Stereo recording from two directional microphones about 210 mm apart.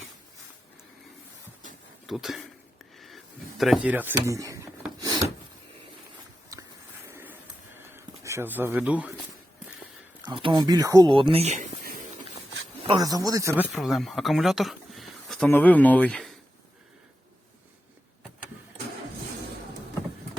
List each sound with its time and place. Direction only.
2.0 s speech: centre (ahead or behind)
3.6 s speech: 5° right (ahead or behind)
7.1 s a sound: 10° right (ahead or behind)
7.9 s speech: 10° right (ahead or behind)
10.2 s speech: 25° right (ahead or behind); by 12.0 s 40° right (ahead or behind)
12.9 s speech: 15° right (ahead or behind)
13.7 s speech: centre (ahead or behind)